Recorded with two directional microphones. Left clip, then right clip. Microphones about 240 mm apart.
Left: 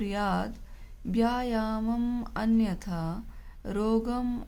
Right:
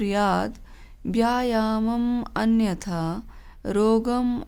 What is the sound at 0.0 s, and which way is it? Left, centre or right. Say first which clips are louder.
A woman's voice: right 8 dB; right.